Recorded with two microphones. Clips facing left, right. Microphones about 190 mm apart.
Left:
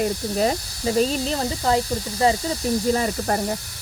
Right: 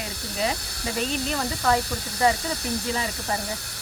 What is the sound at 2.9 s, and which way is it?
Speech, 50° left (ahead or behind).